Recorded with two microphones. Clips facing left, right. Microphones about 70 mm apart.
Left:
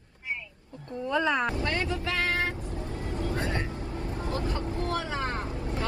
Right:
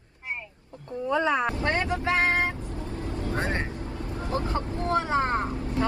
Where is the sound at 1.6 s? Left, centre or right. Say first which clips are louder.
Right 4 dB; right.